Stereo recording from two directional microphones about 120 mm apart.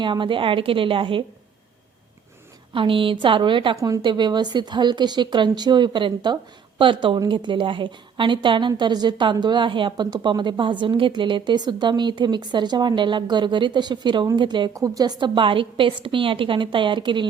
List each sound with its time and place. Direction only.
0.0 s a woman's voice: 40° right (ahead or behind)
2.7 s a woman's voice: 45° right (ahead or behind)
3.8 s speech: 30° right (ahead or behind)
4.0 s a woman's voice: 40° right (ahead or behind)
14.7 s a woman's voice: 30° right (ahead or behind)